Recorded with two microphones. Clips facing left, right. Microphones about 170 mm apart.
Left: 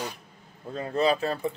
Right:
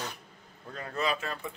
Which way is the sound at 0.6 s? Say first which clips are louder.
Left 8 dB; 25° left (ahead or behind).